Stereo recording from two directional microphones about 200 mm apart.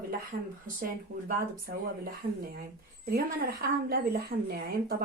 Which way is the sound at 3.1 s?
50° right (ahead or behind).